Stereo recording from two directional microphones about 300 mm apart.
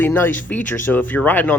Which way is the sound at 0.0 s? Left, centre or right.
Centre.